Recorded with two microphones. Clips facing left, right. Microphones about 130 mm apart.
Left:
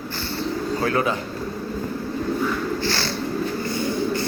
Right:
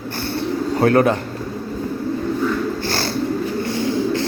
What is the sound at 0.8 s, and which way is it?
Speech, 60° right (ahead or behind).